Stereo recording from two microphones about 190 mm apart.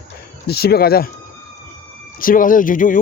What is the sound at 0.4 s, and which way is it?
Speech, 55° left (ahead or behind).